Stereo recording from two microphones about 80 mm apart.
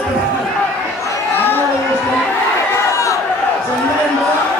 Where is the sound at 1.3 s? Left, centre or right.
Left.